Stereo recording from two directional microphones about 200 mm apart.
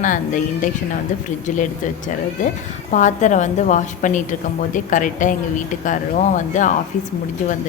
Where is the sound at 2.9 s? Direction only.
40° left (ahead or behind).